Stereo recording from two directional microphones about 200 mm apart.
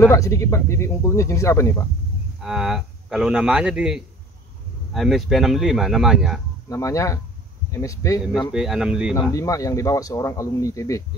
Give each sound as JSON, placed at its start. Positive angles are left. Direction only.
{"t": 0.0, "sound": "speech", "side_deg": 15}
{"t": 2.4, "sound": "a man's voice", "side_deg": -5}
{"t": 6.7, "sound": "speech", "side_deg": 15}
{"t": 8.5, "sound": "a man's voice", "side_deg": -5}
{"t": 9.3, "sound": "speech", "side_deg": 15}